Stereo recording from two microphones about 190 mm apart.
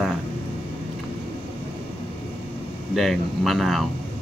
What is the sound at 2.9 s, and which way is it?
Speech, centre (ahead or behind).